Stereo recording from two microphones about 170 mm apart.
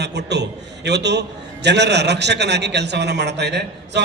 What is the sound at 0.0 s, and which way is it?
A man's voice, 90° right.